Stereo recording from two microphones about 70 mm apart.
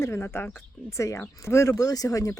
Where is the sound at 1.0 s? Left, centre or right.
Left.